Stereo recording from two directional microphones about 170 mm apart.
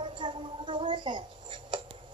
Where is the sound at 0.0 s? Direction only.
30° right (ahead or behind).